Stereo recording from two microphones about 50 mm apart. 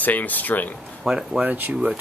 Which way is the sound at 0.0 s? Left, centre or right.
Left.